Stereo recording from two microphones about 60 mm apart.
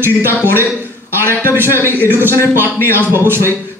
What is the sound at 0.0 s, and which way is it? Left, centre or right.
A man's voice, right.